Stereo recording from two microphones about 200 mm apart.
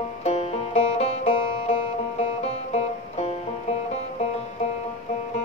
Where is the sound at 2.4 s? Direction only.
35° left (ahead or behind).